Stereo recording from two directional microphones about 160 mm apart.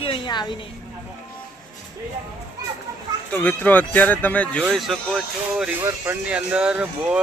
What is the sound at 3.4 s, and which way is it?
Speech, 10° left (ahead or behind).